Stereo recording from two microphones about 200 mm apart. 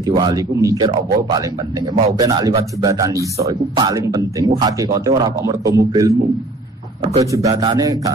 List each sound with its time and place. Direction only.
0.0 s speech: 20° right (ahead or behind)